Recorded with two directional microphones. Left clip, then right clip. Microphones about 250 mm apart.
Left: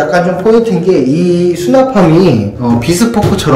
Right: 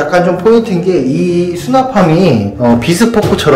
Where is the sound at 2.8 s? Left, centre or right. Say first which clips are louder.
Right 1 dB; centre.